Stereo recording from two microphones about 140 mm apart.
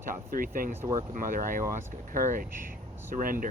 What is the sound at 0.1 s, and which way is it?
Speech, 90° right.